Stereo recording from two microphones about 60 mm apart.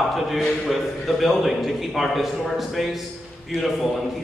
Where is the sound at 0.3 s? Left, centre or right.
Centre.